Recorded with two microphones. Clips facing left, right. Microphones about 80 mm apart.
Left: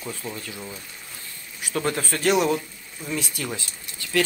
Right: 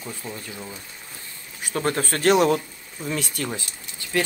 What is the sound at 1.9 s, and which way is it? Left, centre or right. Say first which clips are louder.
Speech: right 3 dB; right.